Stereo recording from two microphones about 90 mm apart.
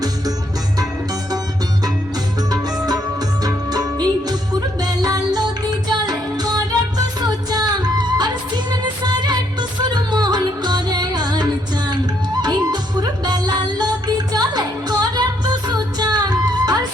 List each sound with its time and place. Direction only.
2.8 s music: 45° right (ahead or behind)